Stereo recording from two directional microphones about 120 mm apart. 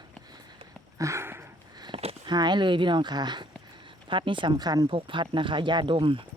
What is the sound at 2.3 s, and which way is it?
Speech, 40° right (ahead or behind).